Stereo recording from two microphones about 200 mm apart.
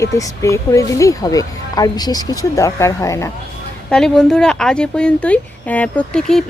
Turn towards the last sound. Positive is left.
turn(degrees=5)  # may be behind; listen again after turning